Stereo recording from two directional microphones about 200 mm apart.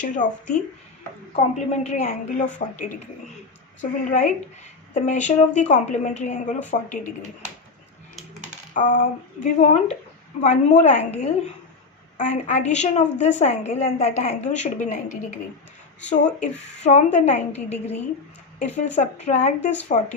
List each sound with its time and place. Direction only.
0.0 s a woman's voice: 40° left (ahead or behind)
3.8 s a woman's voice: 35° left (ahead or behind)
8.7 s a woman's voice: 40° left (ahead or behind)